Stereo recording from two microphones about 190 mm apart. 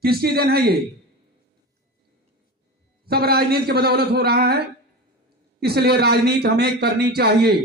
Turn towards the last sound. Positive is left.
turn(degrees=-55)  # may be behind; listen again after turning